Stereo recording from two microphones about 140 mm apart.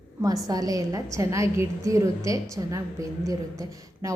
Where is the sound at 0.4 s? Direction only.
25° right (ahead or behind).